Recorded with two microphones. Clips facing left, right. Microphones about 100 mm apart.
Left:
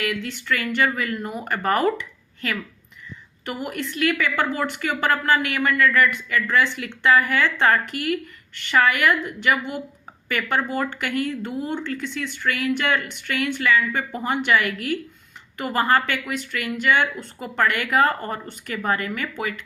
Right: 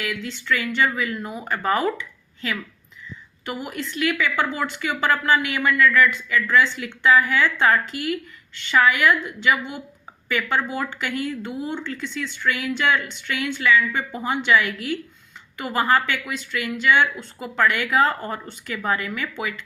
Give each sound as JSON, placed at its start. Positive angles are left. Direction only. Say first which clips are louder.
{"t": 0.1, "sound": "speech", "louder": "even", "side_deg": 55}